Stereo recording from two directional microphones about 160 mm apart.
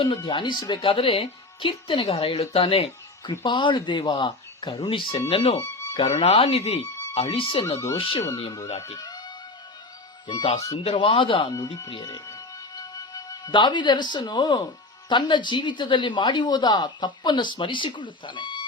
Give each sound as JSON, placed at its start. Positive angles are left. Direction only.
{"t": 0.3, "sound": "speech", "side_deg": 30}
{"t": 5.5, "sound": "music", "side_deg": 20}
{"t": 6.0, "sound": "speech", "side_deg": 40}
{"t": 8.9, "sound": "music", "side_deg": 25}
{"t": 10.2, "sound": "speech", "side_deg": 30}
{"t": 12.0, "sound": "music", "side_deg": 20}
{"t": 15.1, "sound": "speech", "side_deg": 30}